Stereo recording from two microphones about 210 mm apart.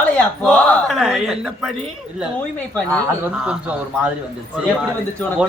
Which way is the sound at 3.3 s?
5° right (ahead or behind).